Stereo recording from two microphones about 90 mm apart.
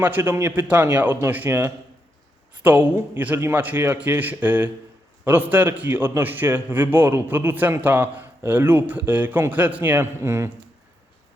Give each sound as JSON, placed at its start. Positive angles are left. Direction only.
{"t": 0.0, "sound": "a man's voice", "side_deg": -25}